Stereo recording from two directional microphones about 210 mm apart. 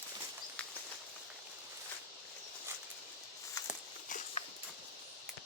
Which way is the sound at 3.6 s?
15° left (ahead or behind).